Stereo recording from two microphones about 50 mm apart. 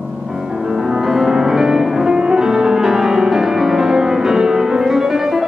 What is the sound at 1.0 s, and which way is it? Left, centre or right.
Music, centre.